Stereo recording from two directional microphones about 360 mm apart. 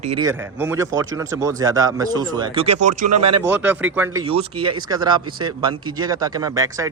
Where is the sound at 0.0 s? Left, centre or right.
Centre.